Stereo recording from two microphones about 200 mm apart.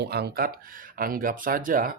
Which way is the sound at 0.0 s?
55° right (ahead or behind).